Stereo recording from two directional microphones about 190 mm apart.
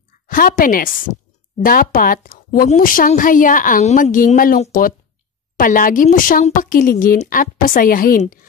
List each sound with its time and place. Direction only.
0.3 s a woman's voice: 45° left (ahead or behind)